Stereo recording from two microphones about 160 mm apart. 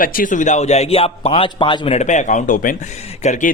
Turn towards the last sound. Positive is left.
turn(degrees=50)  # may be behind; listen again after turning